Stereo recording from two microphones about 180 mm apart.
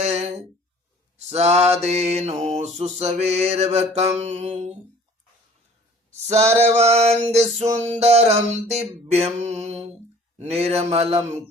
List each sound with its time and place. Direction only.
0.0 s a sound: 40° right (ahead or behind)
1.3 s mantra: 35° right (ahead or behind)
6.5 s mantra: 35° right (ahead or behind)